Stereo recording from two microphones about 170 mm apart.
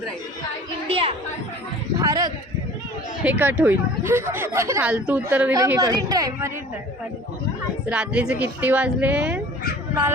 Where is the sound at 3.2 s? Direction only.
10° right (ahead or behind).